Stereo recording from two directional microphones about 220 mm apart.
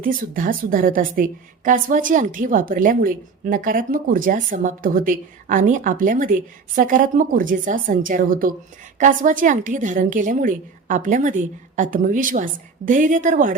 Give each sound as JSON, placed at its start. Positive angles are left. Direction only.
{"t": 0.0, "sound": "a woman's voice", "side_deg": -40}